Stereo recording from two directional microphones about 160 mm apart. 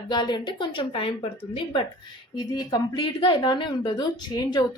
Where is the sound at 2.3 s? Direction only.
25° left (ahead or behind).